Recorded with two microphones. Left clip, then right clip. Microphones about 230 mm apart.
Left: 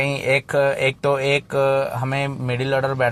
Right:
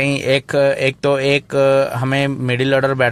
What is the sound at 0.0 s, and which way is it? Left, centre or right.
Speech, right.